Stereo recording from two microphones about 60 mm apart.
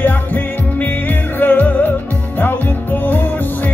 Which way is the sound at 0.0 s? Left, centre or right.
Left.